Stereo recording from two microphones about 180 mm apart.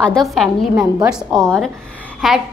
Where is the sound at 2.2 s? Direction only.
Centre (ahead or behind).